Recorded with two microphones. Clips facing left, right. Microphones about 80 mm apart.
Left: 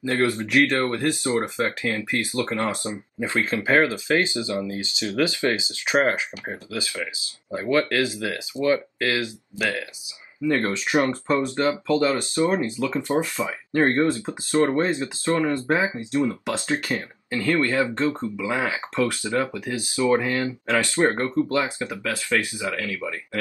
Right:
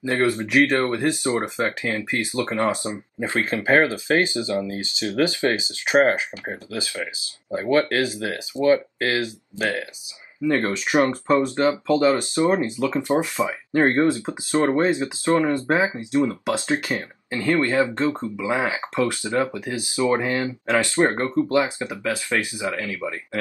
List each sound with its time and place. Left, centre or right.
0.0 s speech: right